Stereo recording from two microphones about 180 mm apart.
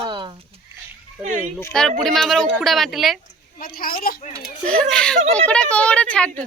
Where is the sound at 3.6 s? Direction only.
55° left (ahead or behind).